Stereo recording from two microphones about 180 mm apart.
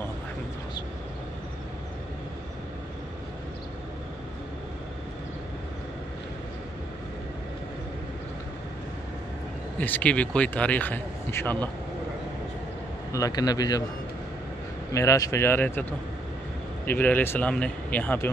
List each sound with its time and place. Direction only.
9.8 s speech: 10° left (ahead or behind)
13.1 s a man's voice: 20° left (ahead or behind)
14.9 s speech: 15° left (ahead or behind)